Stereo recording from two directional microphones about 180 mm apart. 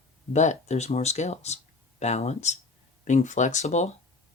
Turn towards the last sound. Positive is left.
turn(degrees=40)  # may be behind; listen again after turning